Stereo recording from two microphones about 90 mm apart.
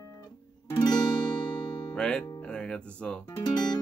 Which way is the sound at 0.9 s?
55° left (ahead or behind).